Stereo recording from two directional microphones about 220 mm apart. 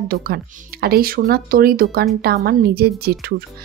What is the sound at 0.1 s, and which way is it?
A woman's voice, 45° right (ahead or behind).